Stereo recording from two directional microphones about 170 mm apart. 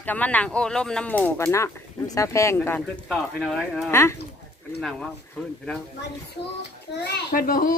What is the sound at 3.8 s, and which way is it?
Speech, 15° left (ahead or behind).